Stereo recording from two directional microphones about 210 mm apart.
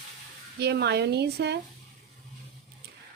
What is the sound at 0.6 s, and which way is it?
Speech, 55° right (ahead or behind).